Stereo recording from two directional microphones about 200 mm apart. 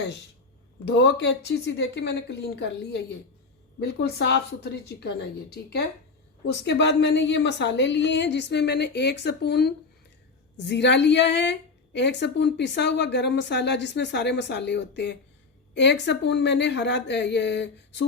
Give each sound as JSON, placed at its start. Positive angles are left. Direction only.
{"t": 0.9, "sound": "a woman's voice", "side_deg": 60}